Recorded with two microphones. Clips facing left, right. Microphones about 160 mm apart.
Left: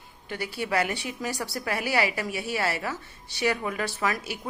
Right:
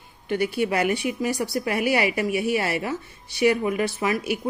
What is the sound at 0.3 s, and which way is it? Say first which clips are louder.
A woman's voice: right 7 dB; 20° right (ahead or behind).